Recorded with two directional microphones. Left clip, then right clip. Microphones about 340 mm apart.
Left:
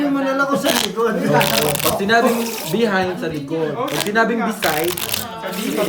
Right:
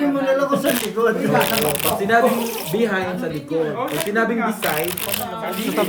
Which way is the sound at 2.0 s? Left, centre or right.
Left.